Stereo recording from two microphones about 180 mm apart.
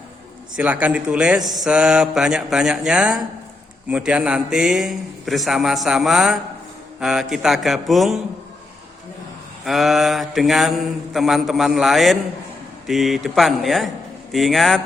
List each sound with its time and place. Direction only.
0.5 s a man's voice: 10° right (ahead or behind)
9.6 s a man's voice: centre (ahead or behind)